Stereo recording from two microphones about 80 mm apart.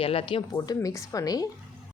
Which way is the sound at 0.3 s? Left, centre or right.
Left.